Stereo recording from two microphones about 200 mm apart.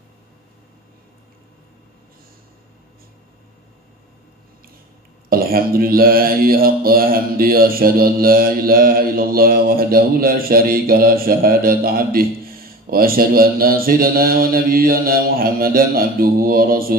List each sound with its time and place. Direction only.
5.3 s mantra: 45° right (ahead or behind)